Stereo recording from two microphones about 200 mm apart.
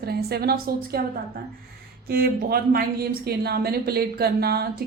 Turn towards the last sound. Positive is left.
turn(degrees=-50)  # may be behind; listen again after turning